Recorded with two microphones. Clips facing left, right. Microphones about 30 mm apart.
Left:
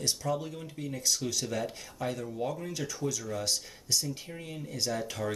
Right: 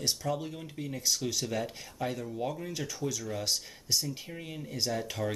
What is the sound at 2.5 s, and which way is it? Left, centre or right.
Speech, centre.